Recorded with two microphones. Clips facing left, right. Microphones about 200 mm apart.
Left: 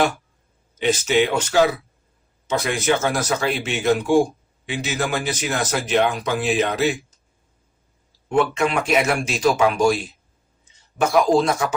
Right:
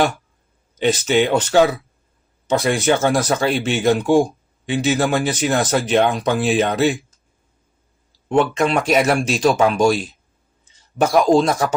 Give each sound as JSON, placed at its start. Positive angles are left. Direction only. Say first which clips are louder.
{"t": 0.8, "sound": "speech", "louder": "right 2 dB", "side_deg": -35}
{"t": 8.3, "sound": "speech", "louder": "right 3 dB", "side_deg": -30}
{"t": 11.3, "sound": "speech", "louder": "right 2 dB", "side_deg": -35}